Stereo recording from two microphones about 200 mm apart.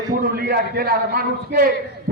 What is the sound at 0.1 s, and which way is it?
A man's voice, 50° right (ahead or behind).